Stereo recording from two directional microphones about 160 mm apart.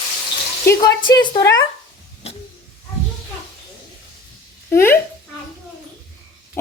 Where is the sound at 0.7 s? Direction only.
25° left (ahead or behind).